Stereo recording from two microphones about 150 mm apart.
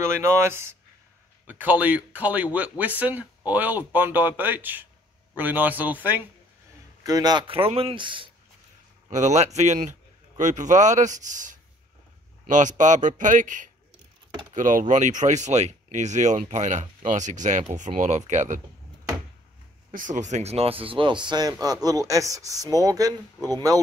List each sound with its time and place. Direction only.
0.0 s speech: 20° right (ahead or behind)
7.0 s speech: 25° right (ahead or behind)
9.1 s a man's voice: 50° right (ahead or behind)
19.9 s speech: 60° right (ahead or behind); by 23.5 s 25° right (ahead or behind)